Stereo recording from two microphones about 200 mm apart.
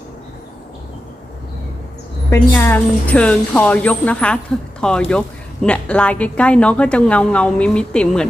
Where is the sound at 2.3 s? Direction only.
10° left (ahead or behind).